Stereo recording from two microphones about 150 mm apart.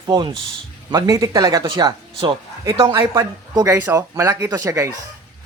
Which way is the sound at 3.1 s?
20° right (ahead or behind).